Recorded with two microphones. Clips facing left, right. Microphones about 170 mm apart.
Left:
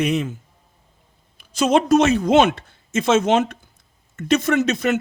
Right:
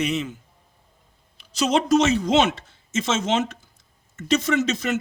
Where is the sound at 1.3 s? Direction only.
50° left (ahead or behind).